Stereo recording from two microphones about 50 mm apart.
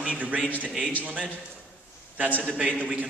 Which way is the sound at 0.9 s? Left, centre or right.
Right.